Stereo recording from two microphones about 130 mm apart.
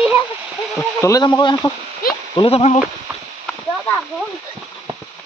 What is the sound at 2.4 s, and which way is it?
Speech, 50° left (ahead or behind).